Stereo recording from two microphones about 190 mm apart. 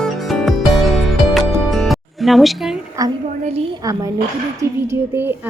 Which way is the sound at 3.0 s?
15° right (ahead or behind).